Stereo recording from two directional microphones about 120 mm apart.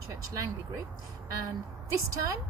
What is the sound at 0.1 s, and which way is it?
Speech, 30° right (ahead or behind).